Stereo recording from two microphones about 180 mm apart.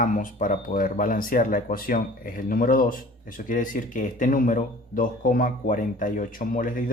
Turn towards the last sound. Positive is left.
turn(degrees=50)  # may be behind; listen again after turning